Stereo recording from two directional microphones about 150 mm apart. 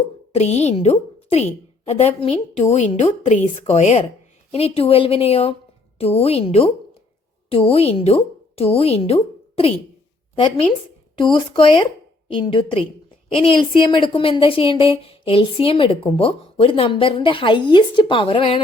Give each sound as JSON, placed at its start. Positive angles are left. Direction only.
{"t": 0.3, "sound": "a woman's voice", "side_deg": 45}